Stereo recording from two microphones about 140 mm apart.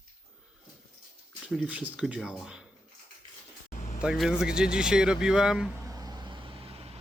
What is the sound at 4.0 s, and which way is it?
Speech, 5° right (ahead or behind).